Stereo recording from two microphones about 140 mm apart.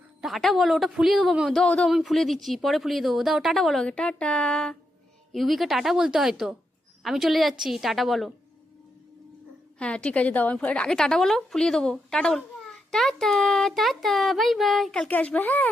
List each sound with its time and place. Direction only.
0.2 s a woman's voice: centre (ahead or behind)
9.7 s a woman's voice: 5° left (ahead or behind)